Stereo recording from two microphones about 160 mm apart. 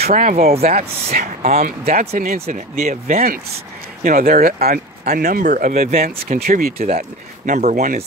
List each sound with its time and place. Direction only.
0.0 s speech: 50° right (ahead or behind)
0.6 s speech: 45° right (ahead or behind)
2.1 s speech: 60° right (ahead or behind)
5.9 s speech: 60° right (ahead or behind)